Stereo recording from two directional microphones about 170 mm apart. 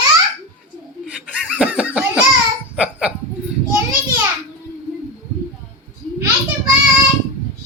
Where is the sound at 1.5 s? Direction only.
5° right (ahead or behind).